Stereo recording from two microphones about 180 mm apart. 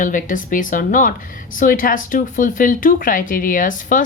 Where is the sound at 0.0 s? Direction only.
45° left (ahead or behind).